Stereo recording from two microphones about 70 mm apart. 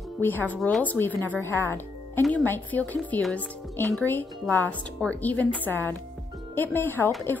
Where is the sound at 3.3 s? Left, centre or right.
Left.